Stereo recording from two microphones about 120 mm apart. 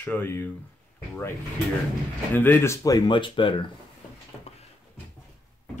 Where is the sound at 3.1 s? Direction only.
45° left (ahead or behind).